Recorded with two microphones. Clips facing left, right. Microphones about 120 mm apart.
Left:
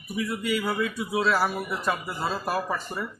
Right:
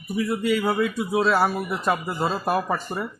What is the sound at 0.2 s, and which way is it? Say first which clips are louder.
A man's voice: right 5 dB; 30° right (ahead or behind).